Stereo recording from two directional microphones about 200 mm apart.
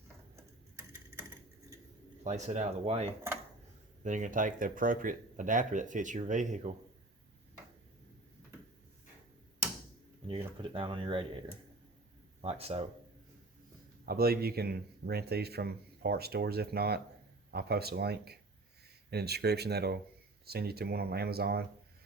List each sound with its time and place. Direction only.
0.8 s typewriter: 10° right (ahead or behind)
2.2 s speech: 35° right (ahead or behind)
10.2 s speech: 25° right (ahead or behind)
12.4 s speech: 30° right (ahead or behind)
14.0 s speech: 50° right (ahead or behind)